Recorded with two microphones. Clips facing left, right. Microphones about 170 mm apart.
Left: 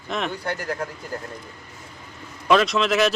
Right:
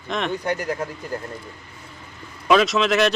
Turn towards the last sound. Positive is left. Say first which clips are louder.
# right 1 dB
turn(degrees=0)  # may be behind; listen again after turning